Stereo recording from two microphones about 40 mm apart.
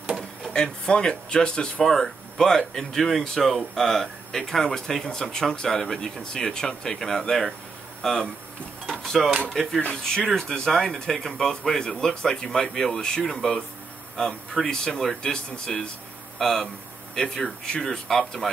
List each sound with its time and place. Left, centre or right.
0.5 s speech: left
1.8 s speech: centre
8.8 s drawer open or close: centre
9.5 s speech: centre
16.3 s speech: centre